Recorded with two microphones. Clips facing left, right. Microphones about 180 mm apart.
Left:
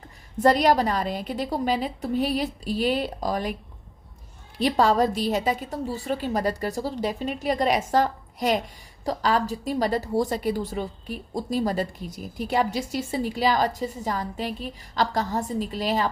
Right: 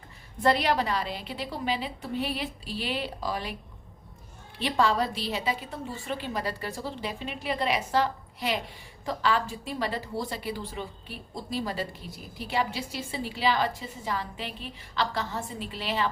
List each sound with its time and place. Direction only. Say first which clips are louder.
0.4 s a woman's voice: left 5 dB; 40° left (ahead or behind)
4.5 s a woman's voice: left 5 dB; 40° left (ahead or behind)